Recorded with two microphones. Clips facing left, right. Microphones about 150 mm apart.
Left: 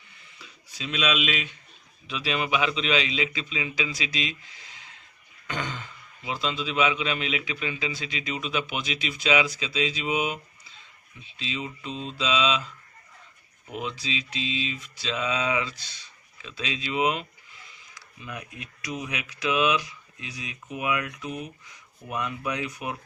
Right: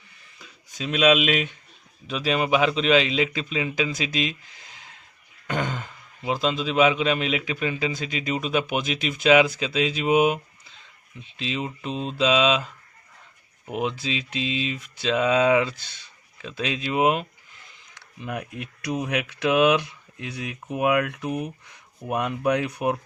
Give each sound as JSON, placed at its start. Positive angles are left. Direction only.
{"t": 0.7, "sound": "a man's voice", "side_deg": -50}
{"t": 18.2, "sound": "speech", "side_deg": -60}